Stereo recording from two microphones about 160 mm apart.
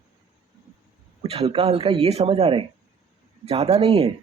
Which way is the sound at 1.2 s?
35° right (ahead or behind).